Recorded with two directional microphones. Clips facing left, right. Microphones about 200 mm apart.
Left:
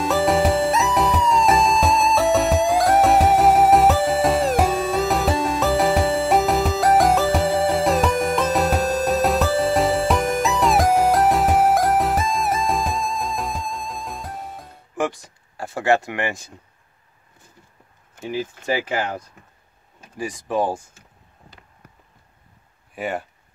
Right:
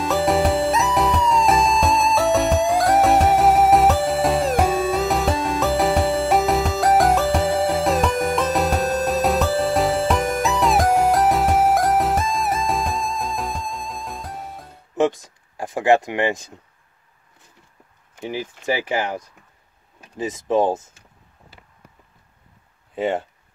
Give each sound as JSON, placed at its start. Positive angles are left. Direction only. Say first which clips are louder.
{"t": 0.0, "sound": "music", "louder": "even", "side_deg": 0}
{"t": 15.0, "sound": "a sound", "louder": "right 5 dB", "side_deg": -20}
{"t": 18.2, "sound": "speech", "louder": "even", "side_deg": -15}
{"t": 22.9, "sound": "speech", "louder": "right 5 dB", "side_deg": -25}